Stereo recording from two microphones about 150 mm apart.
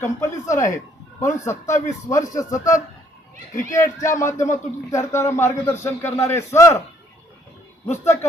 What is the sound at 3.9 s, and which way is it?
A man's voice, 20° left (ahead or behind).